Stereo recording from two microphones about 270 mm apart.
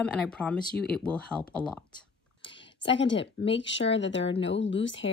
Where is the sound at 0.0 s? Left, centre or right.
Centre.